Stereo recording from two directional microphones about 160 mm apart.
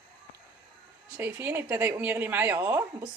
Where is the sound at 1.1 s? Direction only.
10° right (ahead or behind).